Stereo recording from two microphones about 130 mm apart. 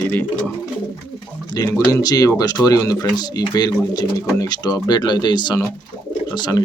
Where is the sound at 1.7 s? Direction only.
20° left (ahead or behind).